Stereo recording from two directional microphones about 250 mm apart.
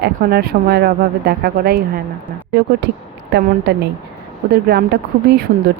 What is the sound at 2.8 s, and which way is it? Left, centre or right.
Speech, right.